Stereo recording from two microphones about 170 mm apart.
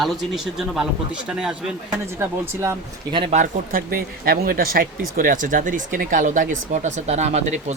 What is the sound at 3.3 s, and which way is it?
Speech, 55° right (ahead or behind).